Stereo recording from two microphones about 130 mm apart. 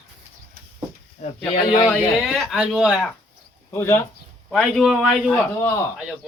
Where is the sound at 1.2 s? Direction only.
65° left (ahead or behind).